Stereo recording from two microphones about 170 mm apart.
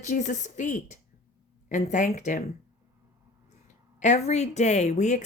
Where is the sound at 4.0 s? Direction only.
40° left (ahead or behind).